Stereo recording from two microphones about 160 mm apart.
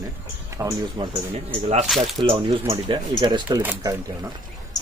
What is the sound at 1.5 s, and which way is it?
Speech, 40° right (ahead or behind).